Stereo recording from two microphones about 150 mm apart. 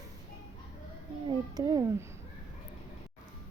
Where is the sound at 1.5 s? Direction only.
25° right (ahead or behind).